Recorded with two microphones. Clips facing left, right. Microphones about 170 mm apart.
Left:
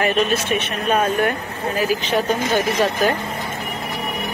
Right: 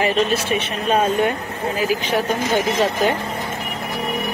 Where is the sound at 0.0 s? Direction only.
25° right (ahead or behind).